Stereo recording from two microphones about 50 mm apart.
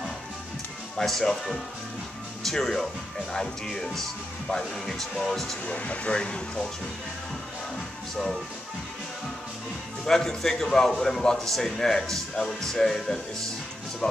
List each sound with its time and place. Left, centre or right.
0.9 s a man's voice: centre
5.7 s speech: left
10.0 s a man's voice: centre